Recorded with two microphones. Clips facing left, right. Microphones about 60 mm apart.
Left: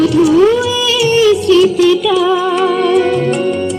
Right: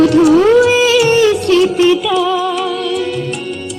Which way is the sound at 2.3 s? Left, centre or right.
Left.